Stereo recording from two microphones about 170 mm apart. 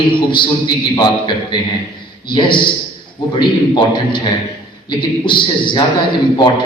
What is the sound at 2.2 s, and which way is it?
A man's voice, 30° left (ahead or behind).